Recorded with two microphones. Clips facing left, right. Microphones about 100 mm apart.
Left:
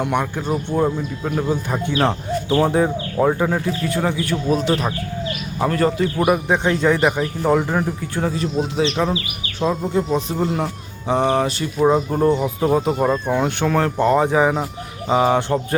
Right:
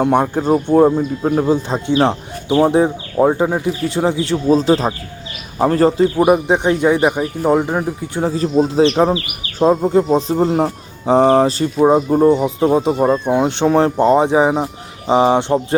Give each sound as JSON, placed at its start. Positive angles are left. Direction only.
{"t": 0.0, "sound": "speech", "side_deg": -35}
{"t": 8.1, "sound": "speech", "side_deg": -30}
{"t": 8.8, "sound": "speech", "side_deg": -50}
{"t": 11.9, "sound": "speech", "side_deg": -15}